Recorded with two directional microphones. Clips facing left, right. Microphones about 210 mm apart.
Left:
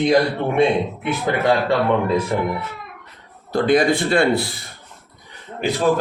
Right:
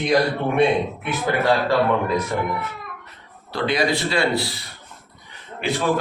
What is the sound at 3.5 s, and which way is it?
A man's voice, 50° left (ahead or behind).